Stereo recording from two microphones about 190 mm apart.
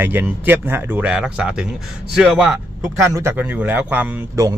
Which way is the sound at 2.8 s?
15° right (ahead or behind).